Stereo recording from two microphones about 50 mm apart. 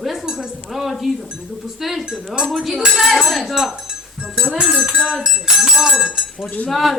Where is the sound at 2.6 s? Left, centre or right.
Centre.